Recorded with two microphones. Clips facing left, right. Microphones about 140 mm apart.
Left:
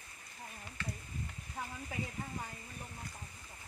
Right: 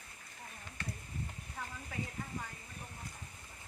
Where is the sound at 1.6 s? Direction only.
20° left (ahead or behind).